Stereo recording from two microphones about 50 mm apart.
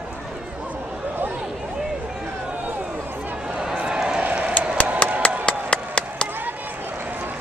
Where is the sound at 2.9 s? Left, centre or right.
Right.